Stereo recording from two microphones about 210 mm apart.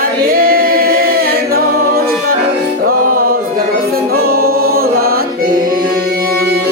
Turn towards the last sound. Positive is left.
turn(degrees=-45)  # may be behind; listen again after turning